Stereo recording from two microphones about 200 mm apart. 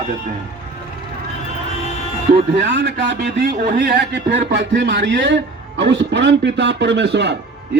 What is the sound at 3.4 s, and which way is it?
Speech, 45° right (ahead or behind).